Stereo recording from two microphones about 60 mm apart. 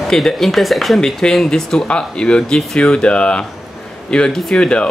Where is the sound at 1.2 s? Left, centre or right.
Centre.